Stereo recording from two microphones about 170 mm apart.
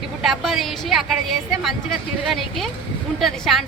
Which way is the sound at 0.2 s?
Centre (ahead or behind).